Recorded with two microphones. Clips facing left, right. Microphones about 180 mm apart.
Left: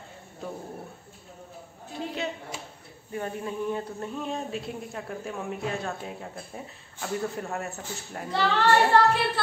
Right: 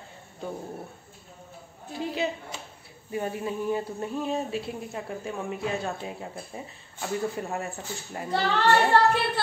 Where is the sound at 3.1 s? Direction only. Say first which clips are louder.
Right 2 dB; 10° right (ahead or behind).